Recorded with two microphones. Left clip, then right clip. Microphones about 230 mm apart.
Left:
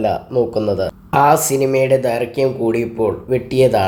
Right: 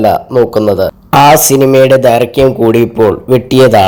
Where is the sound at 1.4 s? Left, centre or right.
Right.